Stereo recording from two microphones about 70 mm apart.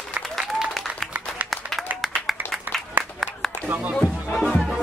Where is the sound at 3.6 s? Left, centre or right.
Right.